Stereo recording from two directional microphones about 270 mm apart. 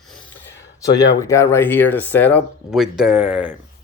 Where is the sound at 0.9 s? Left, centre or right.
Centre.